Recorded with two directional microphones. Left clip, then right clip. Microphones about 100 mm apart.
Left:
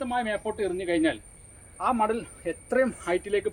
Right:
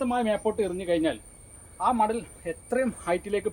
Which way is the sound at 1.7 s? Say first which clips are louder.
Right 1 dB; 10° left (ahead or behind).